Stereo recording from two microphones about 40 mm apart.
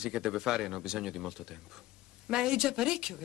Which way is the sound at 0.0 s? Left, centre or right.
Centre.